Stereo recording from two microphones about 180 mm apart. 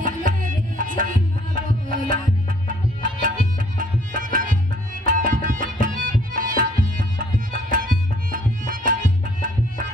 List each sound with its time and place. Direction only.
0.0 s tabla: 45° right (ahead or behind)
2.7 s music: 50° right (ahead or behind)
6.3 s tabla: 50° right (ahead or behind)